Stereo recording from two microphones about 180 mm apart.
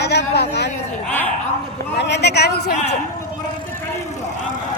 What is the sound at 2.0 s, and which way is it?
Speech, 70° left (ahead or behind).